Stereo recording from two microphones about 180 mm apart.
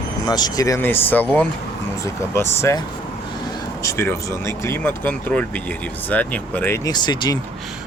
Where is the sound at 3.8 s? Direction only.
15° left (ahead or behind).